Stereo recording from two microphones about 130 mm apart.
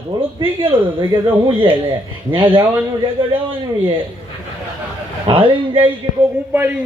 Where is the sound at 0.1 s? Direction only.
30° right (ahead or behind).